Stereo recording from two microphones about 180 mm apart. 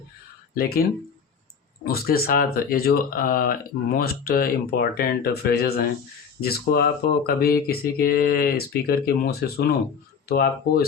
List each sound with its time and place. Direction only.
0.5 s speech: 55° left (ahead or behind)